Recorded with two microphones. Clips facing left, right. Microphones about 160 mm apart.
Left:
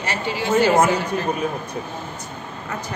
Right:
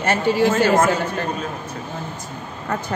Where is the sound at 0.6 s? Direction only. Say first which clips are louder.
Even; 10° left (ahead or behind).